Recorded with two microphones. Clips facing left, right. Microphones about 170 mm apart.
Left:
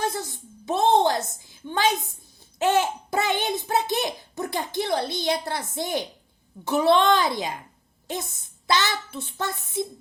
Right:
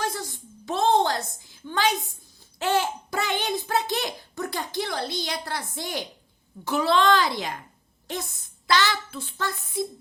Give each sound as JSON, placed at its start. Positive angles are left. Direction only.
{"t": 0.1, "sound": "a sound", "side_deg": 20}
{"t": 2.6, "sound": "child singing", "side_deg": 20}
{"t": 3.4, "sound": "a woman's voice", "side_deg": 20}